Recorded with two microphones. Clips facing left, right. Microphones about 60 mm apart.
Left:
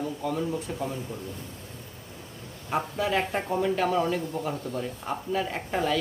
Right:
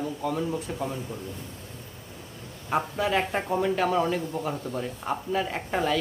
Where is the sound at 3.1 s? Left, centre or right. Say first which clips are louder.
Right 1 dB; centre.